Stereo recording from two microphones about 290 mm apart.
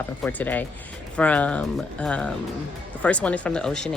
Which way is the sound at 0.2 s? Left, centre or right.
Centre.